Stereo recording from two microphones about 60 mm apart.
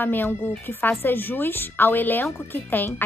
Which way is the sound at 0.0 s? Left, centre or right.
Left.